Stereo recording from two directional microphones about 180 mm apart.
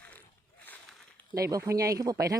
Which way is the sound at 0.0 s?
10° left (ahead or behind).